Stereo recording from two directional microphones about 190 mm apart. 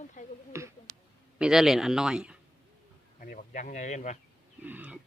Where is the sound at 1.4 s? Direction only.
5° right (ahead or behind).